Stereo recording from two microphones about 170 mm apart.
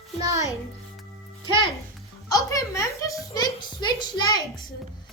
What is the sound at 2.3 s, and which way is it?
A child's voice, 20° left (ahead or behind).